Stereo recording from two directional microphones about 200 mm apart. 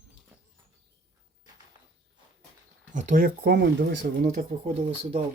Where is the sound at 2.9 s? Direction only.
40° right (ahead or behind).